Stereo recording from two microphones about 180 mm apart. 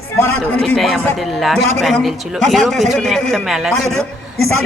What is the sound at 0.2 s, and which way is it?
A man's voice, 10° left (ahead or behind).